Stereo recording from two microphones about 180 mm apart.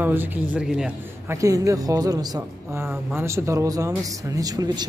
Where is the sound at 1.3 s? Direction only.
20° right (ahead or behind).